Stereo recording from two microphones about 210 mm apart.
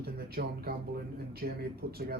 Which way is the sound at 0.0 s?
50° right (ahead or behind).